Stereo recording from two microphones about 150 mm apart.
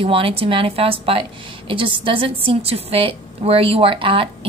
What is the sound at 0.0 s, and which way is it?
A woman's voice, 40° right (ahead or behind).